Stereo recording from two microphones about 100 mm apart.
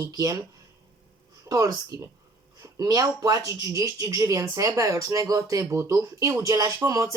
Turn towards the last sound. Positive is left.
turn(degrees=-35)  # may be behind; listen again after turning